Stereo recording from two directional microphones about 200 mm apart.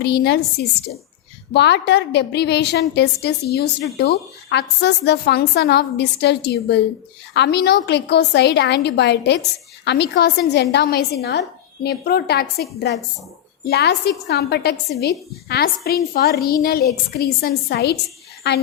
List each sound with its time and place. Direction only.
0.0 s a woman's voice: 55° left (ahead or behind)
1.5 s a woman's voice: 55° left (ahead or behind)